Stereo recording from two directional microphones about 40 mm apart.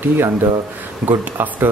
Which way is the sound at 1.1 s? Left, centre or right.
Right.